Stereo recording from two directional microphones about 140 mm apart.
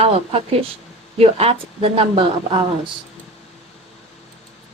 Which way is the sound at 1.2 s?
45° right (ahead or behind).